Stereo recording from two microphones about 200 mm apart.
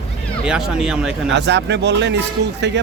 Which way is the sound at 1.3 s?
60° right (ahead or behind).